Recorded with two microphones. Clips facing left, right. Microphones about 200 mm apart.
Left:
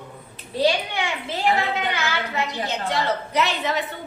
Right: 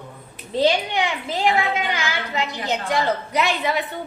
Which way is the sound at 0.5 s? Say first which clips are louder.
Right 2 dB; 20° right (ahead or behind).